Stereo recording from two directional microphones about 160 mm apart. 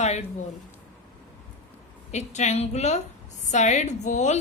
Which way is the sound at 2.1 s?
45° left (ahead or behind).